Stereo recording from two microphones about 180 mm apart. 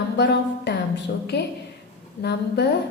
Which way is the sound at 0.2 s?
70° left (ahead or behind).